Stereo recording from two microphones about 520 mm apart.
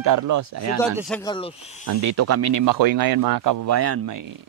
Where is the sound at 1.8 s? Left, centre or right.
Right.